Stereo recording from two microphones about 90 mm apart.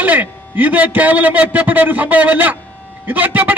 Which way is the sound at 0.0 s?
20° right (ahead or behind).